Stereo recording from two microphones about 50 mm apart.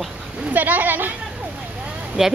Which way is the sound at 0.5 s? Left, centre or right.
Right.